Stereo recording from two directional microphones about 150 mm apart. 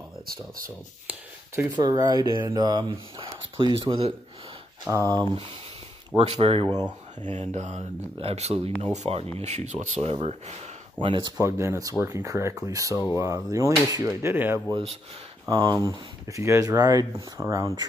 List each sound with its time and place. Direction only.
1.0 s speech: 10° right (ahead or behind)
1.8 s speech: 25° right (ahead or behind)
4.8 s speech: 20° right (ahead or behind)
6.1 s speech: 40° right (ahead or behind)
11.4 s speech: 15° right (ahead or behind)
14.7 s speech: 40° right (ahead or behind); by 17.8 s 20° right (ahead or behind)